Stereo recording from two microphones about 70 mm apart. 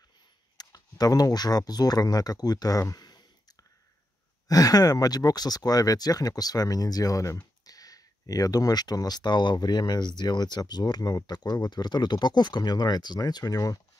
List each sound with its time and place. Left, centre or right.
0.6 s speech: left
4.5 s speech: left